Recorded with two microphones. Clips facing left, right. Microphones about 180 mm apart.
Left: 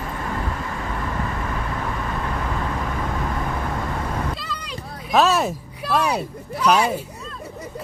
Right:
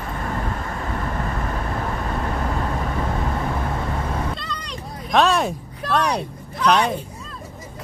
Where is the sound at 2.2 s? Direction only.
40° right (ahead or behind).